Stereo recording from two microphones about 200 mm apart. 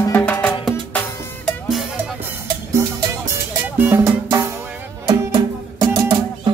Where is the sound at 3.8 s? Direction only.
10° right (ahead or behind).